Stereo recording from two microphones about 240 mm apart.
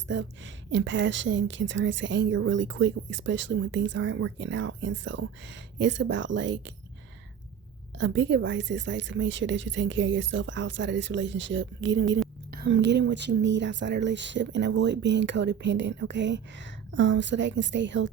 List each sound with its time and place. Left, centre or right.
0.1 s a woman's voice: right
7.9 s a woman's voice: right